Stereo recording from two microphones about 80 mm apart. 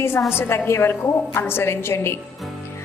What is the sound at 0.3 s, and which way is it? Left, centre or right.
A woman's voice, left.